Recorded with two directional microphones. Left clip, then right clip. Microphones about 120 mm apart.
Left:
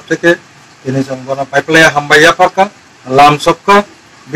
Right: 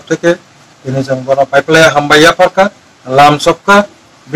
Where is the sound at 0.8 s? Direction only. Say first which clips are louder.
Right 4 dB; 30° right (ahead or behind).